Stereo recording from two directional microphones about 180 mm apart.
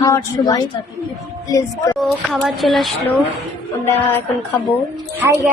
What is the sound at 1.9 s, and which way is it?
A woman's voice, centre (ahead or behind).